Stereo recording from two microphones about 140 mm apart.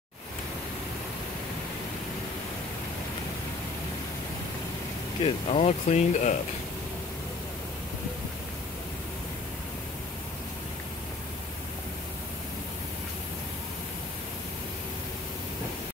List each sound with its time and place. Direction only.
5.2 s speech: 45° left (ahead or behind)